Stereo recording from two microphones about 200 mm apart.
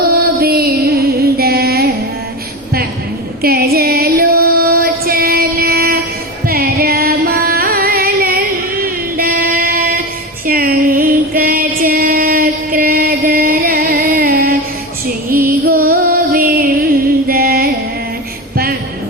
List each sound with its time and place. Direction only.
0.3 s music: 50° right (ahead or behind)
3.4 s female singing: 50° right (ahead or behind)
6.4 s music: 50° right (ahead or behind)